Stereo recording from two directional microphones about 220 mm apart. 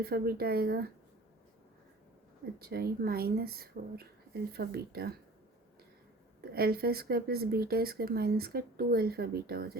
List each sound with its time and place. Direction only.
0.0 s speech: 45° right (ahead or behind)
2.6 s speech: 45° right (ahead or behind)
6.4 s speech: 45° right (ahead or behind)